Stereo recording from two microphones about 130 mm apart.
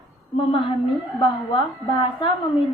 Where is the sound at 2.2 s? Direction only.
40° left (ahead or behind).